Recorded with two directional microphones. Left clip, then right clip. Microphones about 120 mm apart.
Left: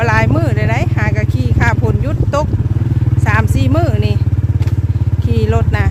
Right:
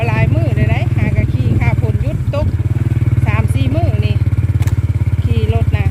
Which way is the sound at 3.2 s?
30° left (ahead or behind).